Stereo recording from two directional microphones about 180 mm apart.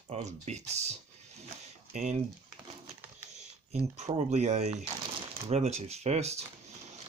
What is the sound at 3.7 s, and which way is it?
Speech, 40° right (ahead or behind).